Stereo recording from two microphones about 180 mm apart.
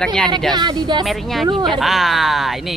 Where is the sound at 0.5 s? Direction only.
25° right (ahead or behind).